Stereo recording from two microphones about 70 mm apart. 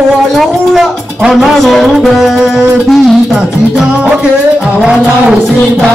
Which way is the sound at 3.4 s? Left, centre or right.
Centre.